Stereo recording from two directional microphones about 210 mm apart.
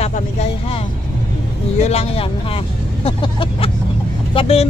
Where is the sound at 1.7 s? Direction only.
30° left (ahead or behind).